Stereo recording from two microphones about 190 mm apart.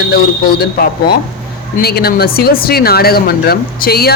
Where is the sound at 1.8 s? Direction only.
55° left (ahead or behind).